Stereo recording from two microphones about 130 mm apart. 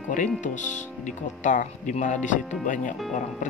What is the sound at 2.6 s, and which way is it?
Speech, 85° left.